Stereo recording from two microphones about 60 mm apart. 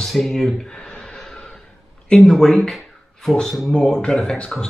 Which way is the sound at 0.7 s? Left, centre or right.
Centre.